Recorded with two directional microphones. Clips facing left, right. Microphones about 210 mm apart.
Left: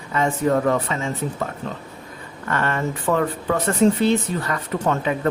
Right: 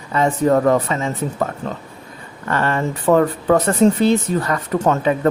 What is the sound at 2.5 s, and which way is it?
Speech, 35° right (ahead or behind).